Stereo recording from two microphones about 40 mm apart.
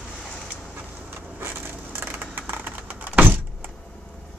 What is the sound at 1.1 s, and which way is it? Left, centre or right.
Vehicle, right.